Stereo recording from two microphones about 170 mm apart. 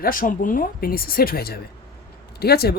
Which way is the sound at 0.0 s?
55° left (ahead or behind).